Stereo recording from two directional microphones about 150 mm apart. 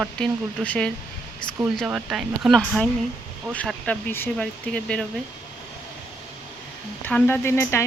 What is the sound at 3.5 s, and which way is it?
Speech, 10° left (ahead or behind).